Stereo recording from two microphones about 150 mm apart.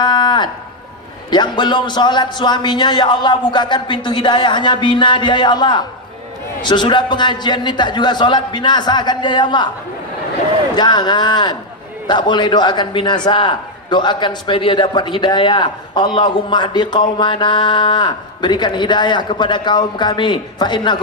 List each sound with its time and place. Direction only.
0.0 s a sound: 30° left (ahead or behind)
1.3 s a man's voice: 30° left (ahead or behind)
10.8 s a man's voice: 30° left (ahead or behind)